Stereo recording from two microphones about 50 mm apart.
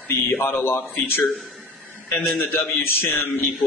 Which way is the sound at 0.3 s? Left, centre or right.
Left.